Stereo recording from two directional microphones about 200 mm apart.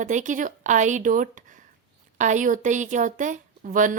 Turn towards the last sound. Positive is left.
turn(degrees=-40)  # may be behind; listen again after turning